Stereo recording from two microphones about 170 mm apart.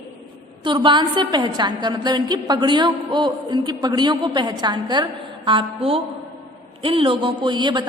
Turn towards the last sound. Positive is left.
turn(degrees=-25)  # may be behind; listen again after turning